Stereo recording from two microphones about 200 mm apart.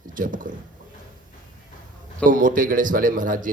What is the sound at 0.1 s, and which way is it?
Speech, 40° right (ahead or behind).